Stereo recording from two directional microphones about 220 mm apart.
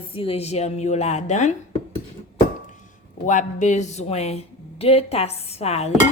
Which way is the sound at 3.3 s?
35° left (ahead or behind).